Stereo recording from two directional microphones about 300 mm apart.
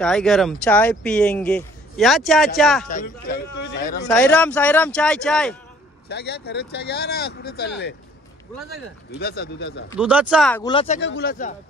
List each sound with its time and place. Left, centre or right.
0.0 s speech: centre
2.9 s a man's voice: left
3.7 s a sound: left
4.1 s speech: centre
6.0 s speech: left
9.2 s speech: left
9.9 s speech: centre
10.6 s speech: centre
11.0 s speech: left